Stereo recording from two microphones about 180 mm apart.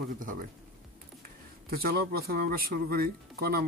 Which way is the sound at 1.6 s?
55° right (ahead or behind).